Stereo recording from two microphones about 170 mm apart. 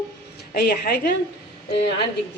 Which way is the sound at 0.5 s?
70° left (ahead or behind).